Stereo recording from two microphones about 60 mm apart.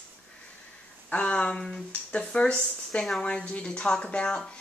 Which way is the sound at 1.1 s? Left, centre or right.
Centre.